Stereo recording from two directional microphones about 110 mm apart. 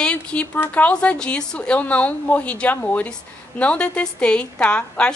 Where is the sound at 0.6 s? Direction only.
15° left (ahead or behind).